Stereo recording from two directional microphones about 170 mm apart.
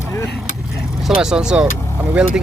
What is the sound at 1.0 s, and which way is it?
Speech, 5° right (ahead or behind).